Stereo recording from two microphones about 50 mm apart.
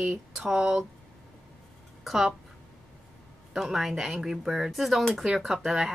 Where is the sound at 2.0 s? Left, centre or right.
Centre.